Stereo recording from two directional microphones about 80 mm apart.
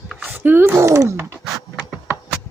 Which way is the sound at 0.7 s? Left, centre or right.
Right.